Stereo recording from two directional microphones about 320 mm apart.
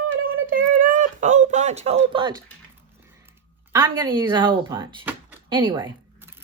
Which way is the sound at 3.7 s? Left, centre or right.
Centre.